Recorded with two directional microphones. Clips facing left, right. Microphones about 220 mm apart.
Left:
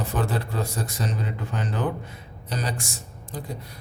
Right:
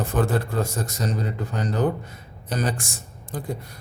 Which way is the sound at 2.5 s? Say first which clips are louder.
Right 4 dB; 50° right (ahead or behind).